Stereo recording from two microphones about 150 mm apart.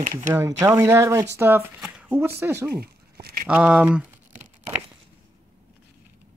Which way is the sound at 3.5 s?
5° right (ahead or behind).